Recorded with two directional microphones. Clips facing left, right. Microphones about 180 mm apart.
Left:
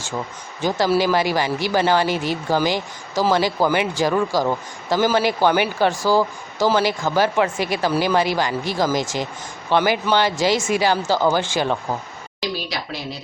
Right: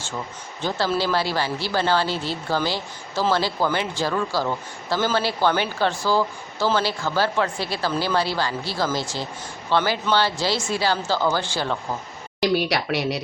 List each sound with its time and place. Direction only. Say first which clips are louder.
0.6 s speech: left 5 dB; 15° left (ahead or behind)
12.4 s speech: right 6 dB; 65° right (ahead or behind)